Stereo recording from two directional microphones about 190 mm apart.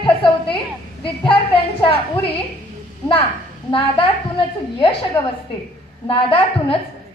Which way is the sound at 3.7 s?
30° left (ahead or behind).